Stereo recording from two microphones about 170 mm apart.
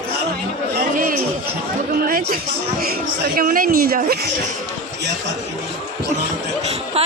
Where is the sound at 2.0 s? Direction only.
60° right (ahead or behind).